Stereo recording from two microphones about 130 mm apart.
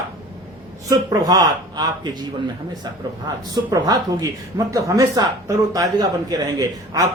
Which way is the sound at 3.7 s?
30° right (ahead or behind).